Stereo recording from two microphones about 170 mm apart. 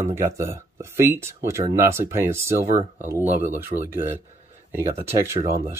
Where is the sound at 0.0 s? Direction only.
15° right (ahead or behind).